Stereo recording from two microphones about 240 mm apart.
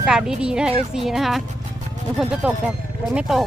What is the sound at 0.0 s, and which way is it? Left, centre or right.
Speech, centre.